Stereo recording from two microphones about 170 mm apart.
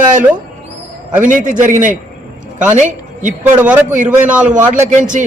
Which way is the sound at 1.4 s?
50° right (ahead or behind).